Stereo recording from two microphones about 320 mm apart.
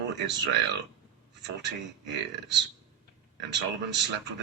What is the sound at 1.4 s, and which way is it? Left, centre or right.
A man's voice, right.